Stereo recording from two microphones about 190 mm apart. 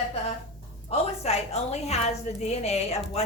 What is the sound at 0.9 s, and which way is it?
A woman's voice, 35° left (ahead or behind).